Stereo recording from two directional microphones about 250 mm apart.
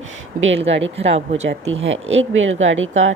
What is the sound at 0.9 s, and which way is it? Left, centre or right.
Speech, right.